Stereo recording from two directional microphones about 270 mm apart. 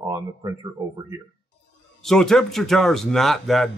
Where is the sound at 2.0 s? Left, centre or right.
Centre.